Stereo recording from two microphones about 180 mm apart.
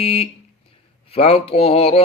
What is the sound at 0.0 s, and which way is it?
Speech, 35° left (ahead or behind).